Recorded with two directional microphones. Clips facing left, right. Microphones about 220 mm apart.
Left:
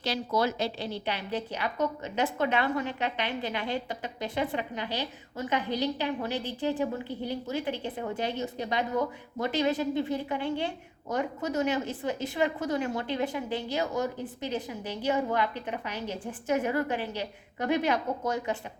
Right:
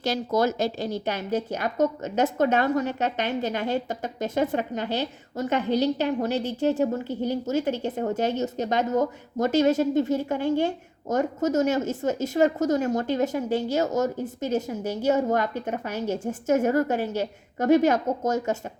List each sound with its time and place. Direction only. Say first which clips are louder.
0.0 s a woman's voice: right 5 dB; 45° right (ahead or behind)